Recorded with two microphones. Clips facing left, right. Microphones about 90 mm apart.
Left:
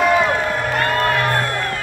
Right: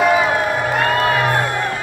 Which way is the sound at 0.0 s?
5° right (ahead or behind).